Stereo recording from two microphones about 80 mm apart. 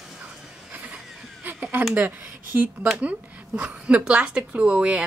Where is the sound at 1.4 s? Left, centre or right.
Right.